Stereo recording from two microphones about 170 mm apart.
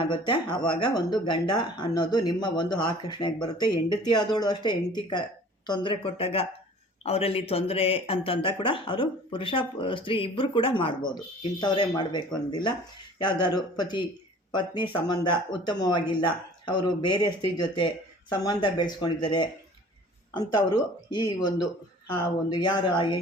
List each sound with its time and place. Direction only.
0.1 s speech: 25° left (ahead or behind)